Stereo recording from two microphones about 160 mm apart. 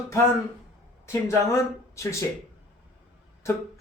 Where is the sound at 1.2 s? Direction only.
20° left (ahead or behind).